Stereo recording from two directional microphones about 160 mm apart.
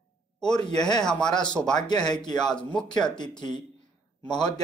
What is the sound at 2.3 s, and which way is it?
Speech, 5° left (ahead or behind).